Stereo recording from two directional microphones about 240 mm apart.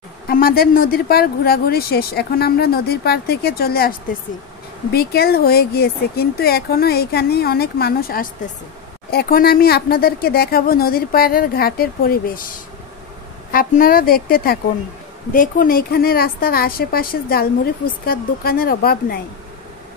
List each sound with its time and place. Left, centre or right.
0.3 s speech: left
4.9 s speech: left